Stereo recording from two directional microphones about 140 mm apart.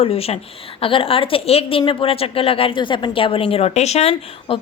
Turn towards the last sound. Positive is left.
turn(degrees=45)  # may be behind; listen again after turning